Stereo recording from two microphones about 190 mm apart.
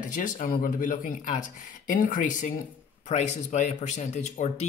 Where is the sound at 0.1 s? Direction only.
45° left (ahead or behind).